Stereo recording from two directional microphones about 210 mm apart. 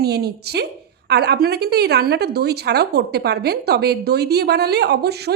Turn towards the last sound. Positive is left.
turn(degrees=-50)  # may be behind; listen again after turning